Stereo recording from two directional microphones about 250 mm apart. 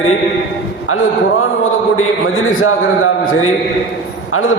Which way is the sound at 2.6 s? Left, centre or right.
Left.